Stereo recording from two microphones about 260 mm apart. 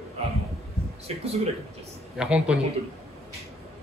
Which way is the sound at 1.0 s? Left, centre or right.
Right.